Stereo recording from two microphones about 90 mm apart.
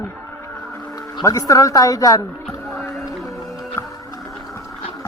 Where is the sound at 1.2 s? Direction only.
35° left (ahead or behind).